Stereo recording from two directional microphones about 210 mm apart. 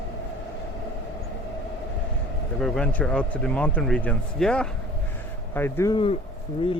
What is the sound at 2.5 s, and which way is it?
Speech, centre (ahead or behind).